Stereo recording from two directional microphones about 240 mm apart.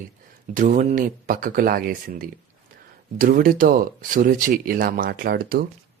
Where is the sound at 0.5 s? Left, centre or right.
Right.